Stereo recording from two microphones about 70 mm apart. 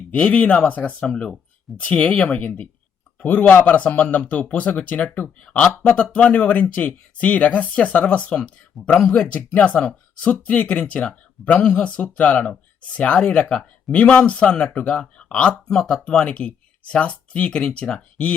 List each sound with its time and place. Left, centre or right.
0.1 s speech: centre
2.4 s speech: left